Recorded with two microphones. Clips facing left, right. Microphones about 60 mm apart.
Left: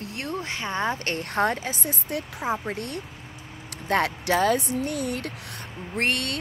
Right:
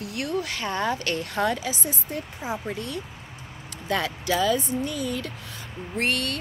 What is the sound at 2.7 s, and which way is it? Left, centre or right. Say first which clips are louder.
Speech: even; left.